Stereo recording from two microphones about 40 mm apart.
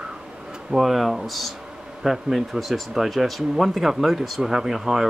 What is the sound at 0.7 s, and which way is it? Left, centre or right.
Speech, centre.